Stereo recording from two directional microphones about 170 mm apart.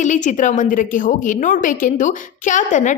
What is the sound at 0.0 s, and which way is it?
A woman's voice, 45° left (ahead or behind).